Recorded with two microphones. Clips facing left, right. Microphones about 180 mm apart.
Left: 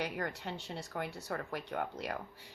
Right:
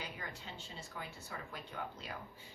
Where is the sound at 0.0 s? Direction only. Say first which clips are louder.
Left 10 dB; 70° left (ahead or behind).